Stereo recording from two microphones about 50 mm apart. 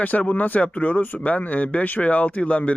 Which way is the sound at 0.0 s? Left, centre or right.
Left.